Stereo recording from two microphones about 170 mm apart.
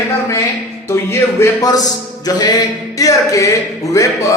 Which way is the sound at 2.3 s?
20° left (ahead or behind).